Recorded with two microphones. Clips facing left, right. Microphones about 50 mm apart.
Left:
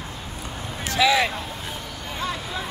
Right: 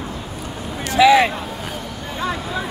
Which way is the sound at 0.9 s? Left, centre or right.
Right.